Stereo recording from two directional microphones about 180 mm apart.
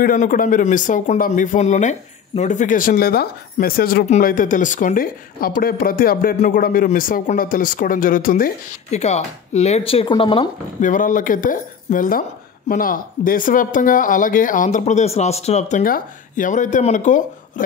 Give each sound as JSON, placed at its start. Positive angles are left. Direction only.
{"t": 0.0, "sound": "a man's voice", "side_deg": 50}
{"t": 8.9, "sound": "speech", "side_deg": 35}
{"t": 10.8, "sound": "a man's voice", "side_deg": 45}
{"t": 15.8, "sound": "a man's voice", "side_deg": 50}